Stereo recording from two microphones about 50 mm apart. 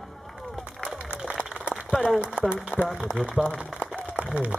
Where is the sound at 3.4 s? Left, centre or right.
Right.